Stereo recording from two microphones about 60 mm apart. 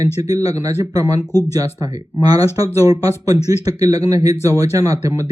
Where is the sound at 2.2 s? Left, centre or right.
Right.